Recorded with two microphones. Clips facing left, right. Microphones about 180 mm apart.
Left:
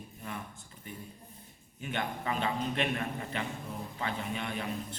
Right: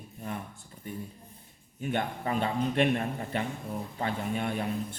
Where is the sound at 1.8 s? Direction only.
45° right (ahead or behind).